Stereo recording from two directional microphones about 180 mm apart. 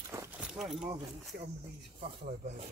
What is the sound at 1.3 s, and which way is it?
Speech, 60° right (ahead or behind).